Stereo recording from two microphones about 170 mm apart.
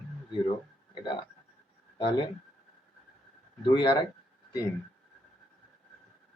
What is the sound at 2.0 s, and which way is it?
Speech, 30° left (ahead or behind).